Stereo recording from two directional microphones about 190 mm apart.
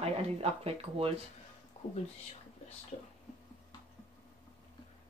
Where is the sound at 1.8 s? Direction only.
35° left (ahead or behind).